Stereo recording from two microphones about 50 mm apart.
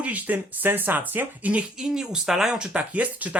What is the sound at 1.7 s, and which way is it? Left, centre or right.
Speech, centre.